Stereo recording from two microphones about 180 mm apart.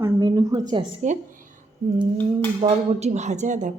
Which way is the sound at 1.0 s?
40° right (ahead or behind).